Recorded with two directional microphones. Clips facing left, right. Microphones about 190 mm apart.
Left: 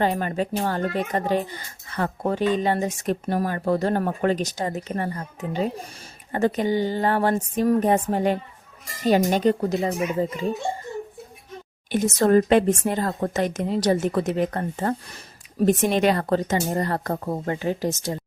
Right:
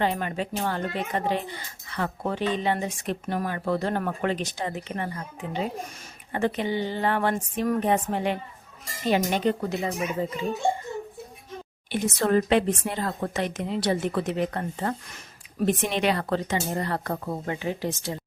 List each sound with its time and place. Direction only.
0.0 s speech: 40° left (ahead or behind)
11.9 s speech: 45° left (ahead or behind)